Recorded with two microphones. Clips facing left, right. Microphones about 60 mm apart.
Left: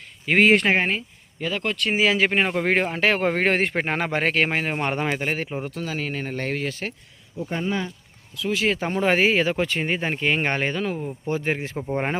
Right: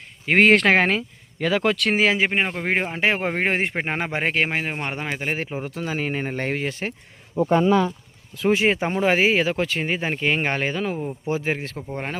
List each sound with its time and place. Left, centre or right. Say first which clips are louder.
0.3 s speech: right 1 dB; right
0.5 s speech: right 3 dB; right
2.1 s speech: left 1 dB; centre
5.8 s speech: right 6 dB; centre
7.4 s speech: right 9 dB; right
8.5 s speech: left 1 dB; right
9.0 s speech: left 1 dB; centre
11.5 s speech: left 3 dB; centre